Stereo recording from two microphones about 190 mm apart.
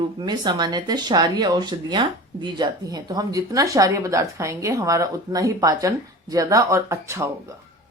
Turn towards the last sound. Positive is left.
turn(degrees=-15)  # may be behind; listen again after turning